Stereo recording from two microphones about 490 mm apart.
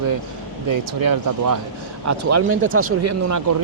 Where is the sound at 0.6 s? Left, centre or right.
Right.